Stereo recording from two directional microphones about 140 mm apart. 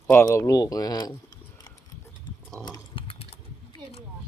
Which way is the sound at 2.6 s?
35° left (ahead or behind).